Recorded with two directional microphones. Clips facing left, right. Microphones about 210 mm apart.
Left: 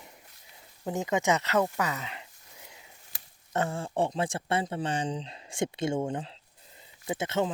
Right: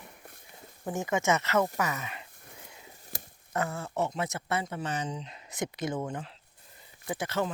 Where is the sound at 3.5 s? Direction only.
30° left (ahead or behind).